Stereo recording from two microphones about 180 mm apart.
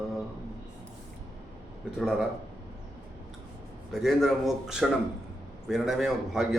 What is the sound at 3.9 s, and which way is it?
Mantra, centre (ahead or behind).